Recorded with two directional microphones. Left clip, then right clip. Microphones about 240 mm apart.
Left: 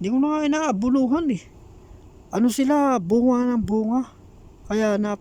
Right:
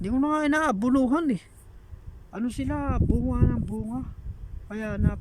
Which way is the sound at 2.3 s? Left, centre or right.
Left.